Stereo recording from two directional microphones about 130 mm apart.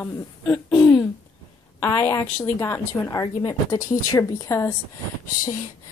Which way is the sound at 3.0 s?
35° left (ahead or behind).